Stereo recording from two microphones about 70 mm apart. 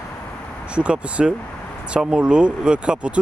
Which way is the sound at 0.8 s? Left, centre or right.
Centre.